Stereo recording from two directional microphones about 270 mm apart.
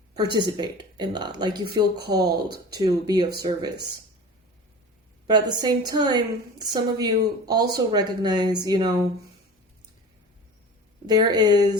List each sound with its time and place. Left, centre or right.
0.3 s speech: centre
5.3 s speech: centre
11.0 s speech: centre